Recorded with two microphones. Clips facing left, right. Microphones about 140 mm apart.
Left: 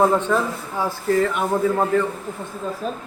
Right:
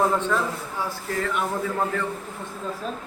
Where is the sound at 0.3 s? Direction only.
25° left (ahead or behind).